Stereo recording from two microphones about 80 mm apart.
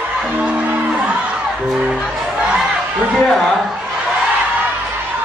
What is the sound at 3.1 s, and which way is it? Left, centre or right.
Speech, centre.